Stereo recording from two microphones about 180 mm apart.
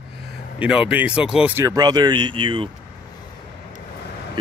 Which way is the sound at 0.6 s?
5° right (ahead or behind).